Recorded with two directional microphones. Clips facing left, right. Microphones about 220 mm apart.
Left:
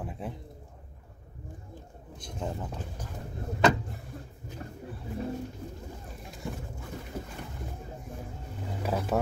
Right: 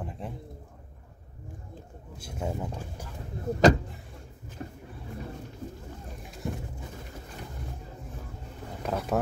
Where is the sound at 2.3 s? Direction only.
10° right (ahead or behind).